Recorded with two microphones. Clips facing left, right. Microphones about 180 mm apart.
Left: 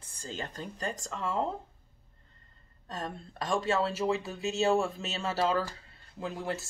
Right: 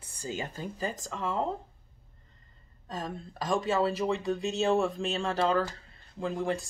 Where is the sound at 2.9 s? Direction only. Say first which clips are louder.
Right 2 dB; centre (ahead or behind).